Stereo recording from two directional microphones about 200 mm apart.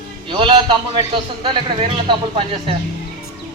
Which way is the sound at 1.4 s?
25° right (ahead or behind).